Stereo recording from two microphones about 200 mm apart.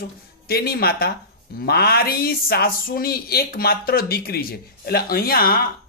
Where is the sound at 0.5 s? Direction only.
50° left (ahead or behind).